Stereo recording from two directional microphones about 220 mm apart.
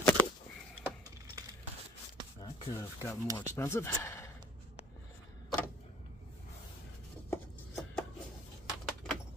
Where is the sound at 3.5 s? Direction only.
10° left (ahead or behind).